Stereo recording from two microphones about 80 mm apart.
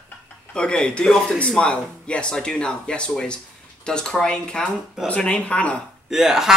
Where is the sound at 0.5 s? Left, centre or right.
Centre.